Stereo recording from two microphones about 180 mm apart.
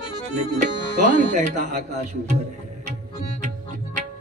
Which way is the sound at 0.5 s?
45° right (ahead or behind).